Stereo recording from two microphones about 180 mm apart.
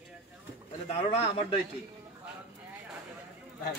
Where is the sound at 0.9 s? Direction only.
35° left (ahead or behind).